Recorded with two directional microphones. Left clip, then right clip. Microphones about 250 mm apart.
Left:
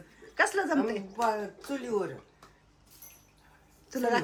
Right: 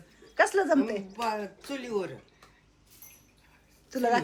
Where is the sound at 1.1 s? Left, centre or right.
Centre.